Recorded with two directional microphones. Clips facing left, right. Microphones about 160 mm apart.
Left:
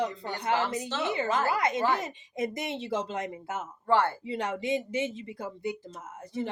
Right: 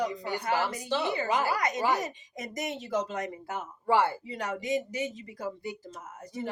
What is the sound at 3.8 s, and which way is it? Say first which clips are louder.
Speech: even; 10° right (ahead or behind).